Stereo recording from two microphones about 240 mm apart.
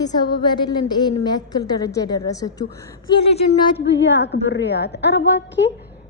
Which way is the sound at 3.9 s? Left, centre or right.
Left.